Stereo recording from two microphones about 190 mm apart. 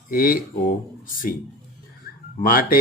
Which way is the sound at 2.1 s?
50° left (ahead or behind).